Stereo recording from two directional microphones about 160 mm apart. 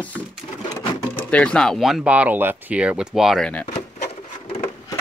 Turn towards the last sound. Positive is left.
turn(degrees=35)  # may be behind; listen again after turning